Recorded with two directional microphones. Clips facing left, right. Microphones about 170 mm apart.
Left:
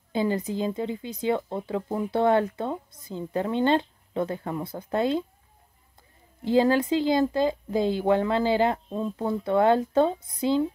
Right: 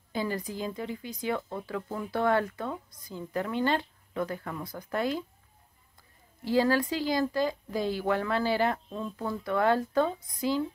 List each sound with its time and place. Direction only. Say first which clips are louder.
0.1 s speech: left 6 dB; 20° left (ahead or behind)
6.4 s speech: left 4 dB; 20° left (ahead or behind)